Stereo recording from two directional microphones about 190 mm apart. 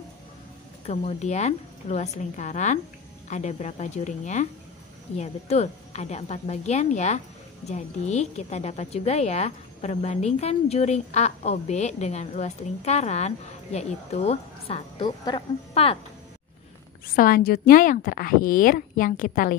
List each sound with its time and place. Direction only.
0.8 s a woman's voice: 35° left (ahead or behind)
17.1 s a woman's voice: 50° left (ahead or behind)